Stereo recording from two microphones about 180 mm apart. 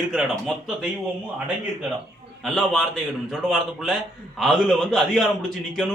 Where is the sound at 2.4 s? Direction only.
5° left (ahead or behind).